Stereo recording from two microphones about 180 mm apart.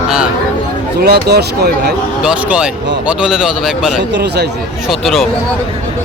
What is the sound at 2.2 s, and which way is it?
A man's voice, 5° right (ahead or behind).